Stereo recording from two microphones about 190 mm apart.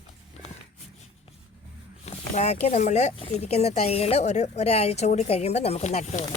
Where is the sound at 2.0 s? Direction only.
35° left (ahead or behind).